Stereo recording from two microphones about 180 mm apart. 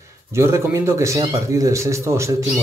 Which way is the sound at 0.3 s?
15° right (ahead or behind).